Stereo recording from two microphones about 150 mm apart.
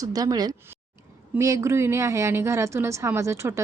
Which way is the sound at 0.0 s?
25° right (ahead or behind).